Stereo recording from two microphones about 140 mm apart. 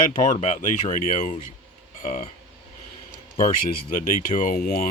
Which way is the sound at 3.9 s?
75° left (ahead or behind).